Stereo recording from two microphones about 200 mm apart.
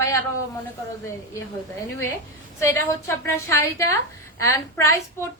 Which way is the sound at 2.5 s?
15° left (ahead or behind).